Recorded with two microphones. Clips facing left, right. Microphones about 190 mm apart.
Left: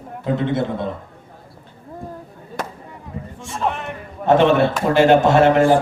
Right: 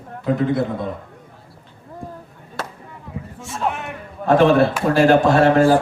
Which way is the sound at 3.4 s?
5° right (ahead or behind).